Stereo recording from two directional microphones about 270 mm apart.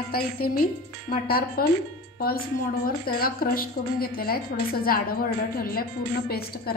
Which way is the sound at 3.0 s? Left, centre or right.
Left.